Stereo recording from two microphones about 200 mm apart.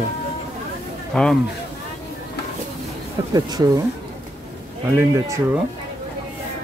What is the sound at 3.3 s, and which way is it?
Speech, 20° right (ahead or behind).